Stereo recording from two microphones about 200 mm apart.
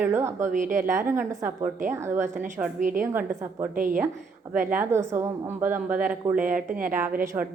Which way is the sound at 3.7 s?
45° right (ahead or behind).